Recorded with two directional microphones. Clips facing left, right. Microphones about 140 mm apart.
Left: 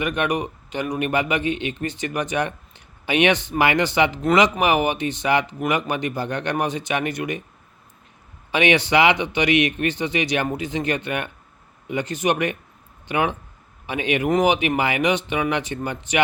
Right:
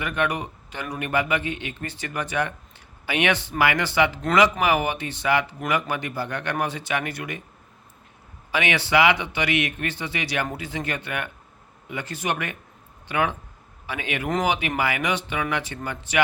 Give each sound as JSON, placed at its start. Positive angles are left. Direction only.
{"t": 0.0, "sound": "speech", "side_deg": 20}
{"t": 8.5, "sound": "speech", "side_deg": 20}